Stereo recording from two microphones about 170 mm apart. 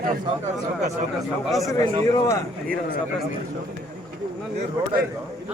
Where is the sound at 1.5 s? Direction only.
Centre (ahead or behind).